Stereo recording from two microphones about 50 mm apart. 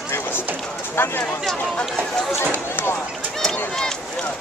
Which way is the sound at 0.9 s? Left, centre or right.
Left.